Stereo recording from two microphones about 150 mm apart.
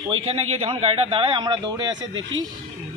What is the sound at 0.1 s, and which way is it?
A man's voice, 45° right (ahead or behind).